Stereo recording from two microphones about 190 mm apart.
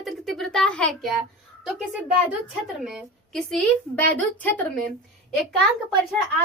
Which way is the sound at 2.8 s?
Centre (ahead or behind).